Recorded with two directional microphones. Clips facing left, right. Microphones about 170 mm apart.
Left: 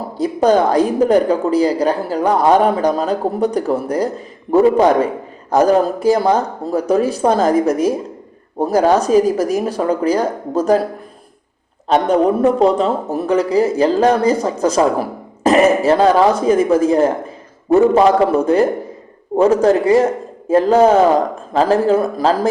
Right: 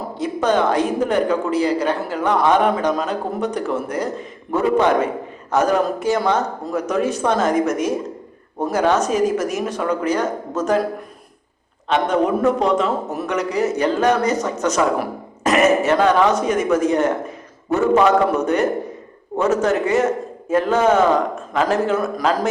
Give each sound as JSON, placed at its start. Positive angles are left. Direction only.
{"t": 0.2, "sound": "speech", "side_deg": 35}
{"t": 11.9, "sound": "speech", "side_deg": 35}